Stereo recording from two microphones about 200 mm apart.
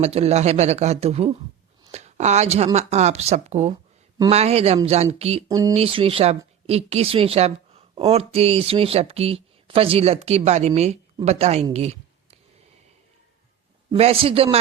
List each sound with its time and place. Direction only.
0.0 s speech: 30° right (ahead or behind)
5.5 s speech: 15° right (ahead or behind)
5.7 s a man's voice: 30° right (ahead or behind)
11.7 s a sound: 30° right (ahead or behind)
13.9 s a man's voice: 30° right (ahead or behind)